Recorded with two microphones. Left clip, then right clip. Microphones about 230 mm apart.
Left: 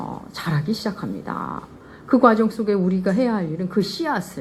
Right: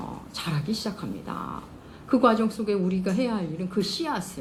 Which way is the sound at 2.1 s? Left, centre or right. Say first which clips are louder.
Left 6 dB; left.